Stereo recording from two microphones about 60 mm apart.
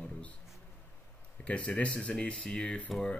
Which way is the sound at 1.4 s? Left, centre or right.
Left.